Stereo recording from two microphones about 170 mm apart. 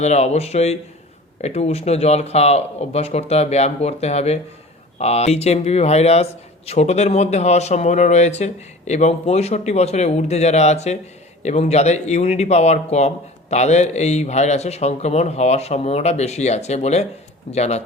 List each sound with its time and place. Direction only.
0.0 s speech: 40° left (ahead or behind)